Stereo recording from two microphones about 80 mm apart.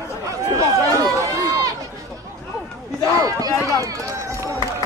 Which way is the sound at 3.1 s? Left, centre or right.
Right.